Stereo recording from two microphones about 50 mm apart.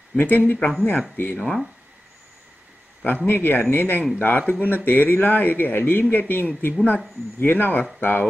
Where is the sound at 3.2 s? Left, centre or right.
Left.